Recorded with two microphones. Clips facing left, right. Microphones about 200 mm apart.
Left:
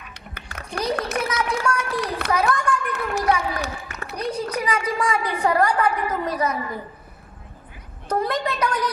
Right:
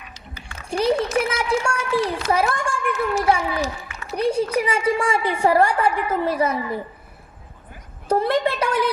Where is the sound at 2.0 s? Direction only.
60° left (ahead or behind).